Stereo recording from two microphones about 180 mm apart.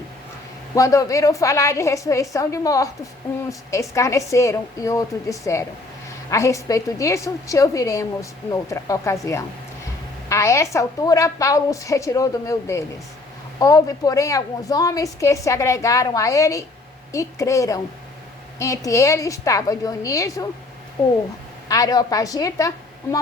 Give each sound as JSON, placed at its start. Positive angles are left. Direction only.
{"t": 0.8, "sound": "a woman's voice", "side_deg": 15}
{"t": 21.7, "sound": "a woman's voice", "side_deg": 20}